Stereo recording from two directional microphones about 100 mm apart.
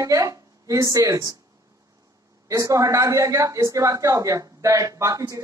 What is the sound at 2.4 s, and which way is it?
A woman's voice, 35° right (ahead or behind).